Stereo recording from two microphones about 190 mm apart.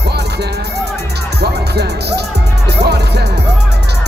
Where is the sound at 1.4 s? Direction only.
60° right (ahead or behind).